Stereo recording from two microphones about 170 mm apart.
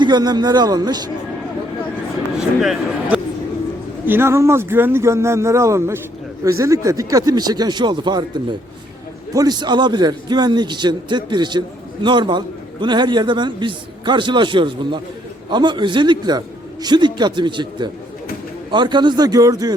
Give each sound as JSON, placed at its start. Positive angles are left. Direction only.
{"t": 0.0, "sound": "a man's voice", "side_deg": -25}
{"t": 2.6, "sound": "speech", "side_deg": 0}
{"t": 4.0, "sound": "a man's voice", "side_deg": -15}
{"t": 9.3, "sound": "a man's voice", "side_deg": -20}